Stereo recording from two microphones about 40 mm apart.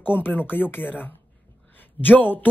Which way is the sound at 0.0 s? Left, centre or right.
Left.